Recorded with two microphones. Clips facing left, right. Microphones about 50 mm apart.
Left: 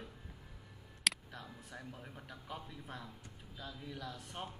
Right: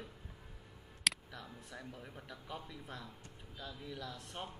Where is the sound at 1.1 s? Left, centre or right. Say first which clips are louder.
Even; centre.